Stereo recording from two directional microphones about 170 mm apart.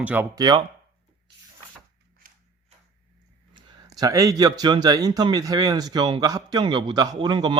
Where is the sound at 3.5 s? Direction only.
20° right (ahead or behind).